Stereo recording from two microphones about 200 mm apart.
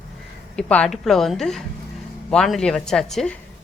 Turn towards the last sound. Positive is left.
turn(degrees=0)  # may be behind; listen again after turning